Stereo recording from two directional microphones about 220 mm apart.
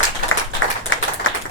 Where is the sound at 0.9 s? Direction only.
60° left (ahead or behind).